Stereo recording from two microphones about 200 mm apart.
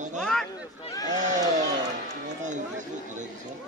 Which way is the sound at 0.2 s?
Centre (ahead or behind).